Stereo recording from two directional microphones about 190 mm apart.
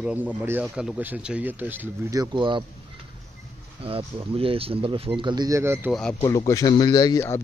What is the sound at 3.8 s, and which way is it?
Speech, 30° right (ahead or behind).